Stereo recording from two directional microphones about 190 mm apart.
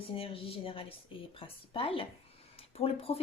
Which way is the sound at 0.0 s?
30° left (ahead or behind).